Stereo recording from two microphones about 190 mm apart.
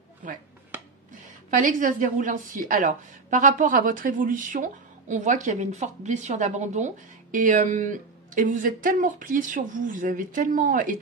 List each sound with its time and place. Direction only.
0.2 s a woman's voice: 45° right (ahead or behind)